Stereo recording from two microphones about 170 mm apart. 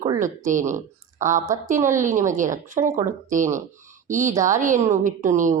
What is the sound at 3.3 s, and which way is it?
A woman's voice, 50° right (ahead or behind).